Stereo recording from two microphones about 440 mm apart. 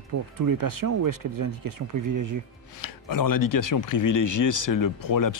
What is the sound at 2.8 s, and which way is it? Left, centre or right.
Speech, left.